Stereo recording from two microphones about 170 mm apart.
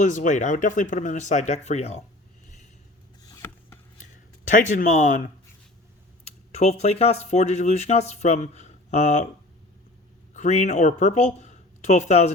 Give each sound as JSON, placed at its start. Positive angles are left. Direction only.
{"t": 0.0, "sound": "speech", "side_deg": 50}
{"t": 3.2, "sound": "a sound", "side_deg": 15}
{"t": 4.5, "sound": "speech", "side_deg": 50}
{"t": 6.2, "sound": "speech", "side_deg": 40}
{"t": 10.3, "sound": "speech", "side_deg": 45}